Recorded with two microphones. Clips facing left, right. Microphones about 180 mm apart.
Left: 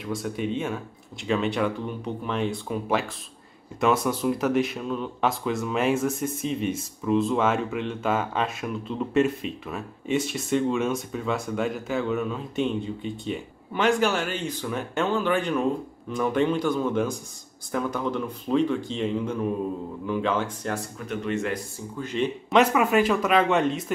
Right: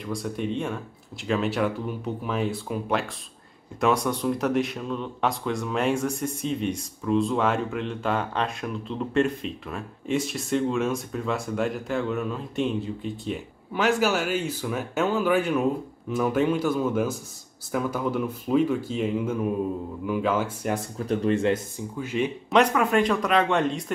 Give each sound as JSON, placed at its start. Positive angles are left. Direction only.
{"t": 0.0, "sound": "speech", "side_deg": 0}
{"t": 21.1, "sound": "a man's voice", "side_deg": -35}
{"t": 21.9, "sound": "speech", "side_deg": -10}
{"t": 22.6, "sound": "speech", "side_deg": 5}